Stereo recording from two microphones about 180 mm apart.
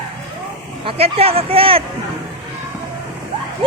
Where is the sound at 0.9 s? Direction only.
35° right (ahead or behind).